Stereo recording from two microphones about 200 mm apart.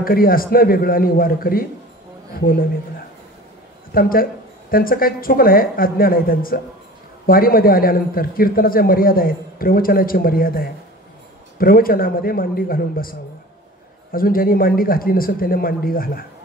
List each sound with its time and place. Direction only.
0.0 s a man's voice: 45° left (ahead or behind)
3.9 s a man's voice: 45° left (ahead or behind)